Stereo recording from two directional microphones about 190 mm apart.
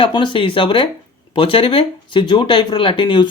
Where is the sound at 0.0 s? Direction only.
25° left (ahead or behind).